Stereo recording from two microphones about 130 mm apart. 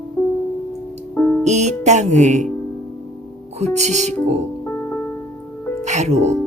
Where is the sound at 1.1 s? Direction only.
15° left (ahead or behind).